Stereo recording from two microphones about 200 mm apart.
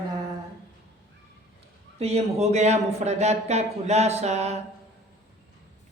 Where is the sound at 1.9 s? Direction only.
30° right (ahead or behind).